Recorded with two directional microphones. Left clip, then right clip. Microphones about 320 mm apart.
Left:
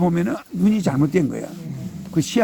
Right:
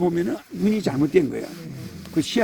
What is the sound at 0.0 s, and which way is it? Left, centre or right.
Speech, left.